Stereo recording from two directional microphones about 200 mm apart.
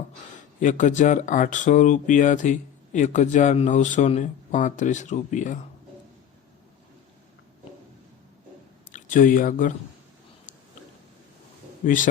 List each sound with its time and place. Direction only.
0.6 s speech: 40° left (ahead or behind)
8.9 s speech: 40° left (ahead or behind)